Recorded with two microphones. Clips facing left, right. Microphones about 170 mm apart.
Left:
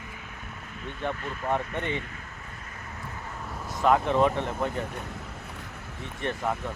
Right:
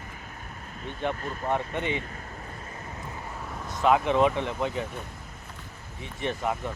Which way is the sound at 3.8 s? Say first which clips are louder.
Even; 5° right (ahead or behind).